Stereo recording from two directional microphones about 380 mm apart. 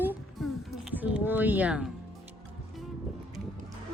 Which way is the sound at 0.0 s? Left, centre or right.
Centre.